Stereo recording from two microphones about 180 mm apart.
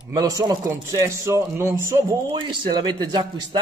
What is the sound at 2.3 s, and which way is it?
Speech, 25° right (ahead or behind).